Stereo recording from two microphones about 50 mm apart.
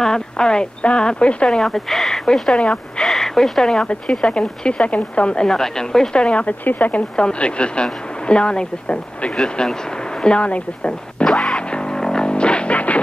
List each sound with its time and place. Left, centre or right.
0.0 s speech: centre
1.6 s speech: centre; by 5.5 s left
5.5 s speech: centre
6.1 s speech: left
6.6 s speech: left
7.2 s speech: left
9.4 s speech: centre
10.2 s speech: left
11.5 s music: centre